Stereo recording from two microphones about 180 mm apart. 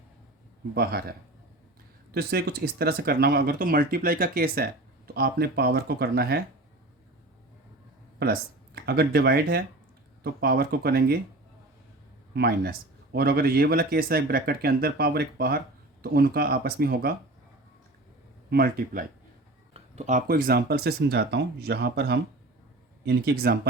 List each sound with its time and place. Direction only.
0.7 s speech: 60° right (ahead or behind)
2.1 s speech: 60° right (ahead or behind)
8.2 s speech: 60° right (ahead or behind)
12.3 s speech: 60° right (ahead or behind)
18.5 s speech: 55° right (ahead or behind)
19.7 s speech: 40° right (ahead or behind); by 23.6 s 60° right (ahead or behind)